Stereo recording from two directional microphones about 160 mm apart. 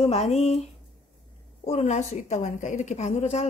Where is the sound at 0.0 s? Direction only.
40° left (ahead or behind).